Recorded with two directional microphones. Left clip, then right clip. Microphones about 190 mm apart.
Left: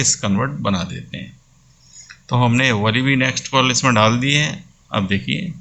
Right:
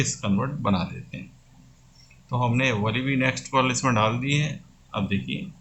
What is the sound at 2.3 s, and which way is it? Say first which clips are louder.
Speech: left 7 dB; 25° left (ahead or behind).